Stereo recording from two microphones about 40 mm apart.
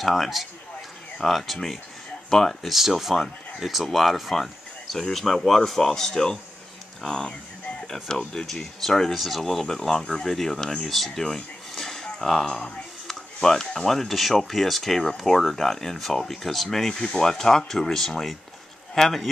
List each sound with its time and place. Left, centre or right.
0.0 s speech: centre
2.2 s speech: centre
2.6 s speech: centre
10.9 s speech: centre
11.2 s a sound: centre
13.0 s speech: centre